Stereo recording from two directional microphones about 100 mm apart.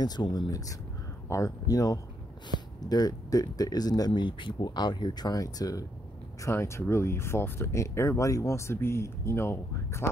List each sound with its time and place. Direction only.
0.0 s speech: 45° left (ahead or behind); by 10.0 s 25° left (ahead or behind)